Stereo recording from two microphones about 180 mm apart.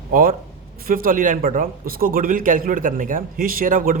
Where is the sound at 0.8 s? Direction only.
50° right (ahead or behind).